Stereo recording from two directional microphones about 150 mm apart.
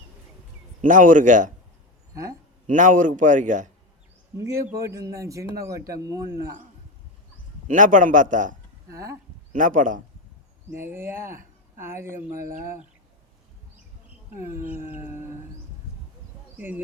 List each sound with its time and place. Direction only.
0.8 s a man's voice: 60° right (ahead or behind)
2.6 s a man's voice: 60° right (ahead or behind)
4.8 s a man's voice: 20° right (ahead or behind)
7.7 s a man's voice: 60° right (ahead or behind)
8.9 s a man's voice: 20° right (ahead or behind)
9.5 s a man's voice: 60° right (ahead or behind)
10.7 s speech: 15° right (ahead or behind)
14.5 s a man's voice: 65° right (ahead or behind)
14.8 s speech: 15° right (ahead or behind)
16.6 s speech: 10° right (ahead or behind)